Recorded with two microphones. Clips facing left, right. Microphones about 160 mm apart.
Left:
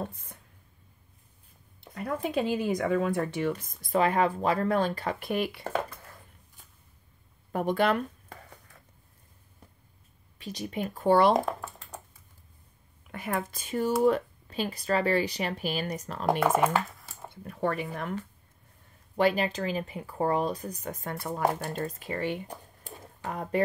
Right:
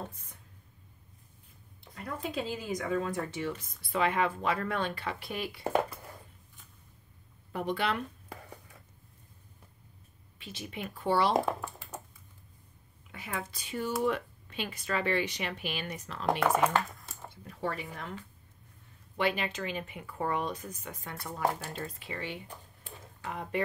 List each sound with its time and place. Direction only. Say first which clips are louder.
2.0 s speech: left 6 dB; 60° left (ahead or behind)
7.5 s speech: left 6 dB; 45° left (ahead or behind)
10.4 s speech: left 7 dB; 40° left (ahead or behind)
11.6 s a sound: even; 5° right (ahead or behind)
13.1 s speech: left 7 dB; 55° left (ahead or behind)
16.3 s speech: left 3 dB; 5° left (ahead or behind)
17.5 s speech: left 6 dB; 55° left (ahead or behind)
19.1 s speech: left 6 dB; 40° left (ahead or behind)
22.8 s a sound: left 4 dB; 40° left (ahead or behind)